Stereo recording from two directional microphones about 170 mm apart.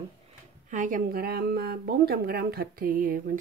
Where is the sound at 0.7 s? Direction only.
50° right (ahead or behind).